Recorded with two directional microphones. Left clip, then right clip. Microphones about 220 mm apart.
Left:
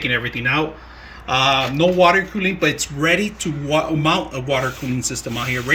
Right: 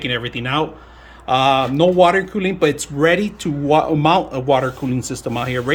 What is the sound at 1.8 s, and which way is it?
Speech, 20° right (ahead or behind).